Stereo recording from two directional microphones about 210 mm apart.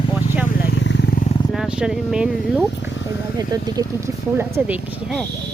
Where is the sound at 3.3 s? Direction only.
15° right (ahead or behind).